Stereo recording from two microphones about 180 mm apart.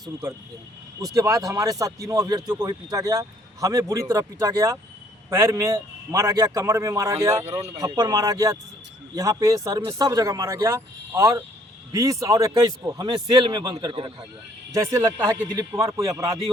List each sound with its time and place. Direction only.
0.0 s speech: 20° right (ahead or behind)
14.7 s speech: 15° right (ahead or behind)